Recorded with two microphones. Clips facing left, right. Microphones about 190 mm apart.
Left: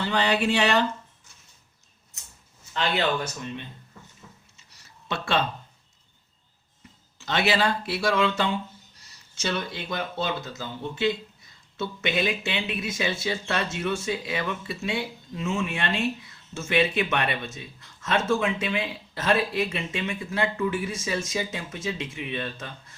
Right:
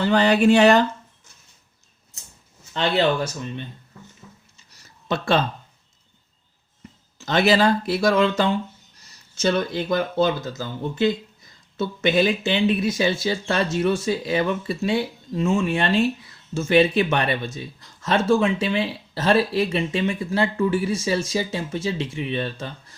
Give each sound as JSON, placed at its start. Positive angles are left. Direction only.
{"t": 0.0, "sound": "speech", "side_deg": -45}
{"t": 5.0, "sound": "speech", "side_deg": -40}
{"t": 7.2, "sound": "speech", "side_deg": -40}